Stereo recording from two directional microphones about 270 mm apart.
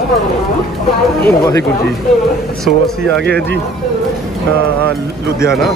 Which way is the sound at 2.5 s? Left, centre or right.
Centre.